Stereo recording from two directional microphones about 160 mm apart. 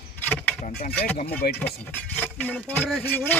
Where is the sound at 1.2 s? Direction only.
70° left (ahead or behind).